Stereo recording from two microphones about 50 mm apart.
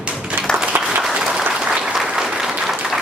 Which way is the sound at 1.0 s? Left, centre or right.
Centre.